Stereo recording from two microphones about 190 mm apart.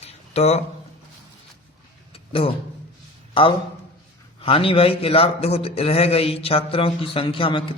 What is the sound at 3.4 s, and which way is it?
A man's voice, 25° left (ahead or behind).